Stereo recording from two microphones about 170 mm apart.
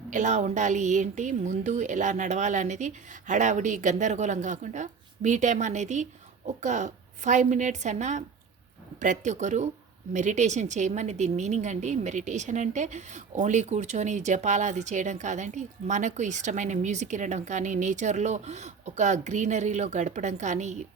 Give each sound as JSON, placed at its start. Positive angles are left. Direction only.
{"t": 0.1, "sound": "a woman's voice", "side_deg": -45}